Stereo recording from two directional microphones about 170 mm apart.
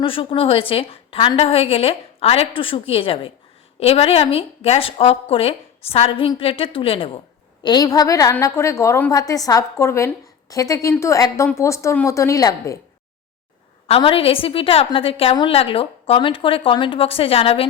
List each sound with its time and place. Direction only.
0.0 s a woman's voice: 30° left (ahead or behind)
13.8 s a woman's voice: 35° left (ahead or behind)